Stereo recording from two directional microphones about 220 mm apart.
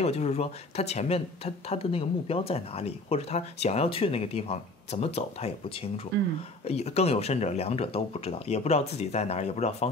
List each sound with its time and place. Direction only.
0.0 s speech: 30° left (ahead or behind)
6.6 s speech: 30° left (ahead or behind)